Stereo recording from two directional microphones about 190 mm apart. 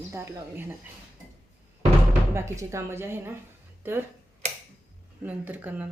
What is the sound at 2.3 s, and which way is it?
Speech, 15° right (ahead or behind).